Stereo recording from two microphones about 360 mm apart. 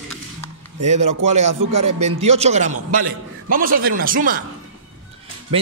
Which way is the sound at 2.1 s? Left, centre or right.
Centre.